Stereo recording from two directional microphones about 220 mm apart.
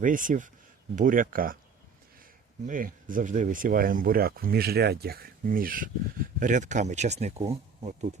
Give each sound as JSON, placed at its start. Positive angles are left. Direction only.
{"t": 0.0, "sound": "speech", "side_deg": -35}
{"t": 2.6, "sound": "speech", "side_deg": -40}